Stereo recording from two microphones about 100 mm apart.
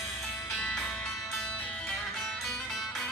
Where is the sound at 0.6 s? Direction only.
5° left (ahead or behind).